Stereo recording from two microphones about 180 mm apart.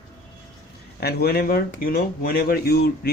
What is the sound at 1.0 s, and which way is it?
Speech, 60° left (ahead or behind).